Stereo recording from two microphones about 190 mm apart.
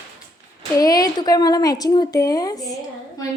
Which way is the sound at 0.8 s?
20° left (ahead or behind).